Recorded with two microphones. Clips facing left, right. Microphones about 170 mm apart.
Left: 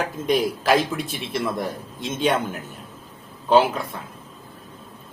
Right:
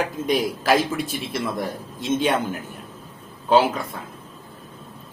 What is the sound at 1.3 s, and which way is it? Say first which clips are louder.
Speech: left 2 dB; centre (ahead or behind).